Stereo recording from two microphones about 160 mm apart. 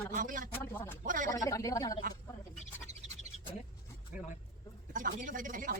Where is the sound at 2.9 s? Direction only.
45° right (ahead or behind).